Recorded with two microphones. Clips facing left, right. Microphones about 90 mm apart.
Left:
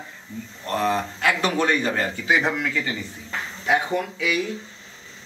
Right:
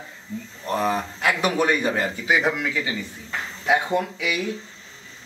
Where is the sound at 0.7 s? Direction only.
10° right (ahead or behind).